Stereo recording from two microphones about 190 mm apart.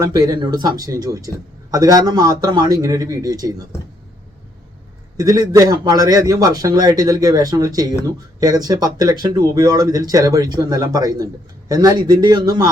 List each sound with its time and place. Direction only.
0.0 s a man's voice: 20° right (ahead or behind)
5.1 s a man's voice: 20° right (ahead or behind)